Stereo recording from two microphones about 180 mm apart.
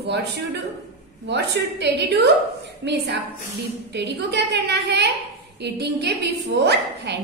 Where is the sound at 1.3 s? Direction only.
70° right (ahead or behind).